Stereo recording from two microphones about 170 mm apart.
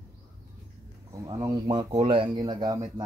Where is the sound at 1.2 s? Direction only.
25° right (ahead or behind).